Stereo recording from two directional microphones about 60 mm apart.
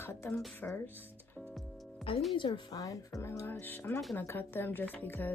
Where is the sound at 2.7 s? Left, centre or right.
Left.